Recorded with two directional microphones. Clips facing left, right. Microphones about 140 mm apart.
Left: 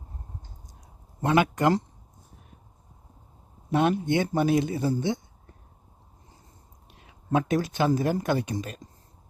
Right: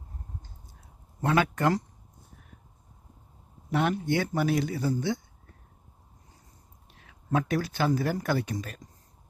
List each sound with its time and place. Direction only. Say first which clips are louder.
1.2 s speech: left 3 dB; 20° left (ahead or behind)
3.7 s speech: left 3 dB; 20° left (ahead or behind)
6.8 s speech: left 3 dB; 20° left (ahead or behind)